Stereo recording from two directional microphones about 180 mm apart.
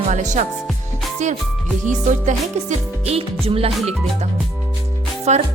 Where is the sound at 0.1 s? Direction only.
40° right (ahead or behind).